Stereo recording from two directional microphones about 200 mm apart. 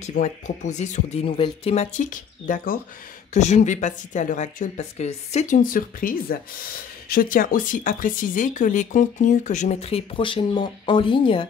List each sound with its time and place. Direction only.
0.2 s speech: 35° left (ahead or behind)